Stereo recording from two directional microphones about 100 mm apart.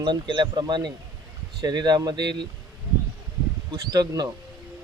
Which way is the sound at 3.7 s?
40° right (ahead or behind).